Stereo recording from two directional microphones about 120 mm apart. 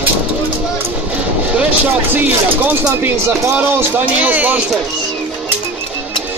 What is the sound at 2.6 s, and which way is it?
Speech, 15° right (ahead or behind).